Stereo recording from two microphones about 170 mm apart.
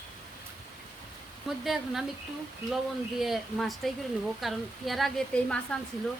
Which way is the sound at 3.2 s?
Centre (ahead or behind).